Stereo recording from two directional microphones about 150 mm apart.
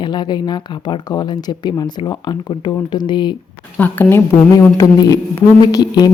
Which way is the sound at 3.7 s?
15° left (ahead or behind).